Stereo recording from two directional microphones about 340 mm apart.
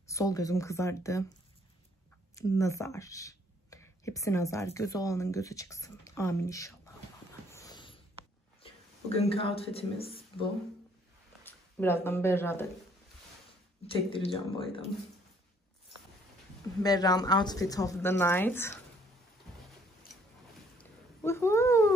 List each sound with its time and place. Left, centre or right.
0.0 s a woman's voice: centre
2.3 s speech: centre
7.5 s sniff: centre
8.6 s speech: centre
13.9 s a woman's voice: centre
16.8 s a woman's voice: centre
20.7 s cat: centre